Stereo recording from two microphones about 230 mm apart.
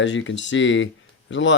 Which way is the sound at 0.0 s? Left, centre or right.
Left.